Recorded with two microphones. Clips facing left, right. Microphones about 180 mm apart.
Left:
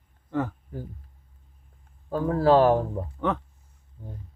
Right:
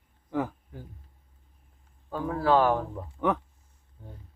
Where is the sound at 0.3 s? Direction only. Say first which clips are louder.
Left 2 dB; 10° right (ahead or behind).